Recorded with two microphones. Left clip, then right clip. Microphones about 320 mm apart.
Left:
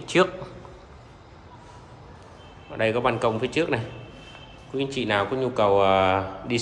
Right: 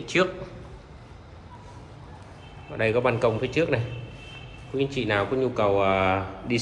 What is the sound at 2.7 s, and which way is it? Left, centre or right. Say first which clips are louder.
Speech: even; centre.